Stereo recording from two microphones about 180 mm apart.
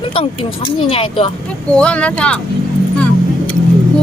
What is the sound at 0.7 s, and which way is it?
Speech, 30° left (ahead or behind).